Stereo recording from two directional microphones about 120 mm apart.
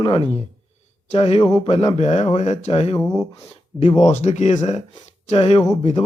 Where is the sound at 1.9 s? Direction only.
70° left (ahead or behind).